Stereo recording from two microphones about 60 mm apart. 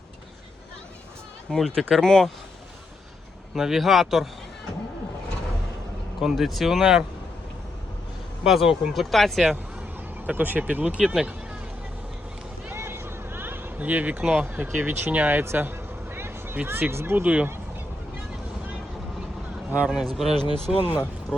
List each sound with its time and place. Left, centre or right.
1.5 s speech: centre
3.5 s speech: centre
6.1 s speech: centre
8.4 s speech: centre
10.2 s speech: right
11.0 s speech: centre
12.7 s a sound: right
14.4 s speech: right
15.4 s a sound: right
16.6 s speech: right
17.2 s speech: right
19.7 s a man's voice: centre
20.1 s speech: centre